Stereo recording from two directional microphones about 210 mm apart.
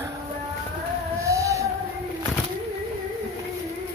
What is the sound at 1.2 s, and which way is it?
Music, 15° right (ahead or behind).